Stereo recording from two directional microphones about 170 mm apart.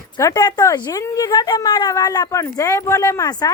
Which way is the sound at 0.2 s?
20° left (ahead or behind).